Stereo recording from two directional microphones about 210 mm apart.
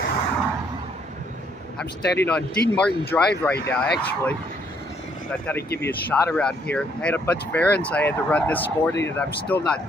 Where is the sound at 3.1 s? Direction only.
5° left (ahead or behind).